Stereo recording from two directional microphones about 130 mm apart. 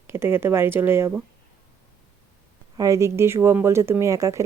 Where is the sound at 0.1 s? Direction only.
20° right (ahead or behind).